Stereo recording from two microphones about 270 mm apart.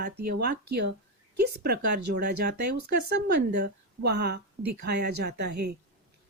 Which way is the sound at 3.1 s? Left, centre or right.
Right.